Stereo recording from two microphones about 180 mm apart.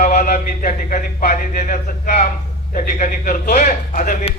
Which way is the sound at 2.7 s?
45° left (ahead or behind).